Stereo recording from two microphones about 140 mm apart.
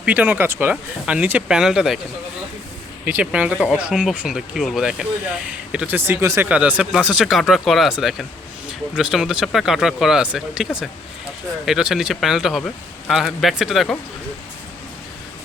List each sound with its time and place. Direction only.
0.0 s speech: 10° right (ahead or behind)
3.0 s speech: 10° right (ahead or behind)
6.0 s speech: 20° right (ahead or behind); by 13.9 s centre (ahead or behind)